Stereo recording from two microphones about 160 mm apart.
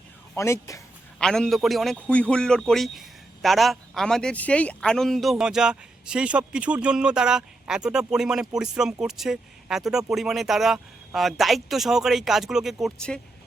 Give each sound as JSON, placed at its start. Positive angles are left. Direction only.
{"t": 0.3, "sound": "speech", "side_deg": 20}
{"t": 1.2, "sound": "a man's voice", "side_deg": 5}